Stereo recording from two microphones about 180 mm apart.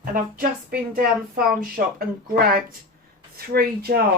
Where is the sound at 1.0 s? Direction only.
55° right (ahead or behind).